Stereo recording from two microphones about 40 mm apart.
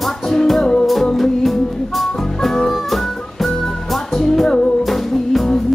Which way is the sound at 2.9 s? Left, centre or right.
Centre.